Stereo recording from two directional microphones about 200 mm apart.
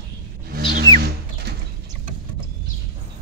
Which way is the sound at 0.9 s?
50° right (ahead or behind).